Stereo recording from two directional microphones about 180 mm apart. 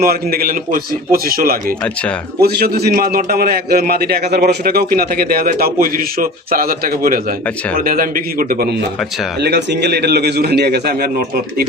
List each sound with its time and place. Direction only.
0.0 s a man's voice: 60° right (ahead or behind)
9.4 s a man's voice: 70° right (ahead or behind)